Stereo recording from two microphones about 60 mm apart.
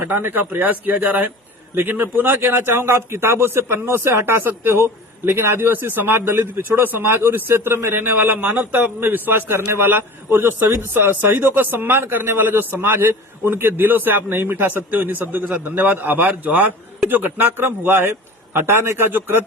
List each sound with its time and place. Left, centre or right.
0.0 s a man's voice: right